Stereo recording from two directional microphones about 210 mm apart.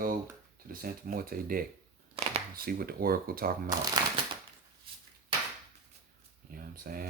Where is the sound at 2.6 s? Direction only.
45° right (ahead or behind).